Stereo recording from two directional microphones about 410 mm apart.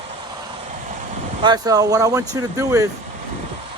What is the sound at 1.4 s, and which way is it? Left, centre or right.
Speech, centre.